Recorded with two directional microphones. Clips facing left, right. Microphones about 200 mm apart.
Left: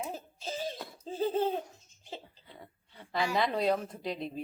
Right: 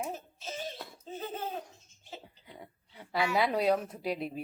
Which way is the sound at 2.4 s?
10° right (ahead or behind).